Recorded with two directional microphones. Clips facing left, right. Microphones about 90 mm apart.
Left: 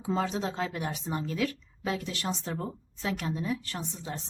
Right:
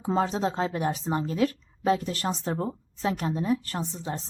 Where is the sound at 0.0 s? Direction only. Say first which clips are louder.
Right 4 dB; 35° right (ahead or behind).